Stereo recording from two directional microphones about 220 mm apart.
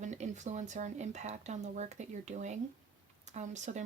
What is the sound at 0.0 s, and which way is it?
Speech, 35° right (ahead or behind).